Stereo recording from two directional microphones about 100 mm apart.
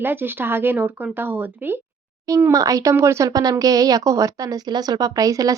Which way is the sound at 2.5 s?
35° right (ahead or behind).